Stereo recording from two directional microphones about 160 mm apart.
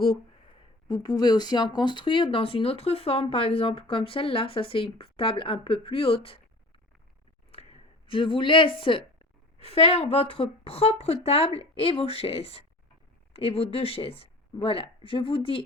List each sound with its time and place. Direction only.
0.9 s speech: 25° left (ahead or behind)
7.5 s speech: 40° left (ahead or behind)